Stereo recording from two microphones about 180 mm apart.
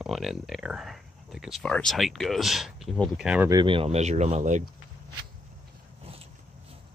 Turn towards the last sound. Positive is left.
turn(degrees=-35)  # may be behind; listen again after turning